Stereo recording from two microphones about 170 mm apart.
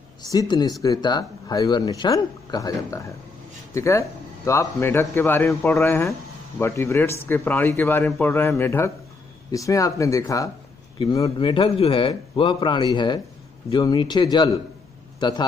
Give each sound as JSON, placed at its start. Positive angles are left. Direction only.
{"t": 0.3, "sound": "a man's voice", "side_deg": 20}